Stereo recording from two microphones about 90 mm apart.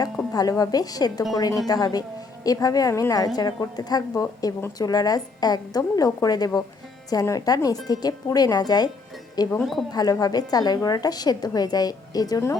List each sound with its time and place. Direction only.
0.3 s a woman's voice: 45° left (ahead or behind)